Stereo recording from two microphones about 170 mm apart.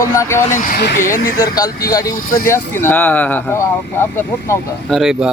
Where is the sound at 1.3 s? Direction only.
20° left (ahead or behind).